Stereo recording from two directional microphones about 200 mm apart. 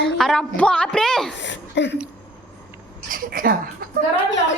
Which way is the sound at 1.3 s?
65° left (ahead or behind).